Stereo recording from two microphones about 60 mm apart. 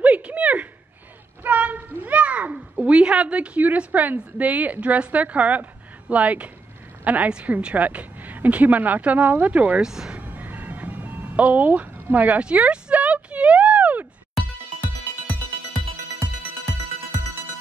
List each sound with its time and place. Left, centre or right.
0.0 s a sound: right
2.7 s a woman's voice: centre
9.8 s speech: centre
10.1 s ice cream truck: right